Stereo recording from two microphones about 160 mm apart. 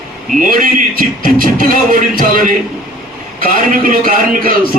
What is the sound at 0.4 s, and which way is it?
A man's voice, 60° right (ahead or behind).